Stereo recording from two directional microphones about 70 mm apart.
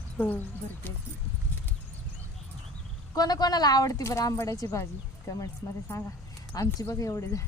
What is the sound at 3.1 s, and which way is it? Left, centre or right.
Speech, left.